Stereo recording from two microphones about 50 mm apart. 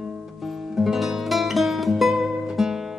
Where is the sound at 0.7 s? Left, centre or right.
Centre.